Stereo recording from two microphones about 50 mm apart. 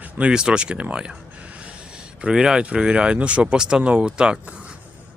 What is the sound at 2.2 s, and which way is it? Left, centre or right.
Speech, centre.